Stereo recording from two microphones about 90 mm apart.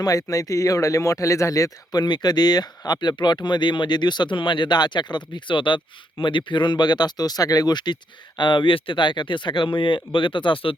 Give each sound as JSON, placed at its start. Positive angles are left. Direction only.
{"t": 0.0, "sound": "speech", "side_deg": 40}